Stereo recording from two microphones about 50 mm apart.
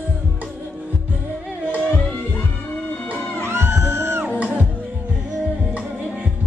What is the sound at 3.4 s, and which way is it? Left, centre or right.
Music, right.